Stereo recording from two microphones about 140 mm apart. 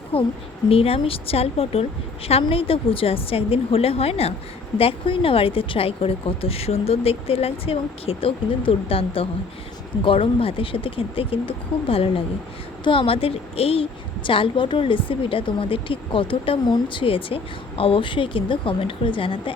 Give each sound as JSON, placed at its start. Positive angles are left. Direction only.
{"t": 0.1, "sound": "a woman's voice", "side_deg": 40}